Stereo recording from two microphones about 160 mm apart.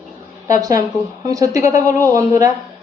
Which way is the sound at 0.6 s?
20° right (ahead or behind).